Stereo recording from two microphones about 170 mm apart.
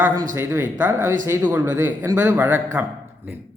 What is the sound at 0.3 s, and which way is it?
Speech, 10° right (ahead or behind).